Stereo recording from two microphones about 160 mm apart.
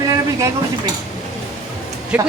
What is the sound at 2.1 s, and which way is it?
Speech, 5° right (ahead or behind).